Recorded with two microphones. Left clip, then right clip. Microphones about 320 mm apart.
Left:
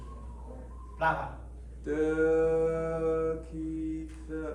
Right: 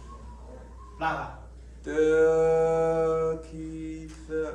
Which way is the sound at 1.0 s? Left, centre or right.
Centre.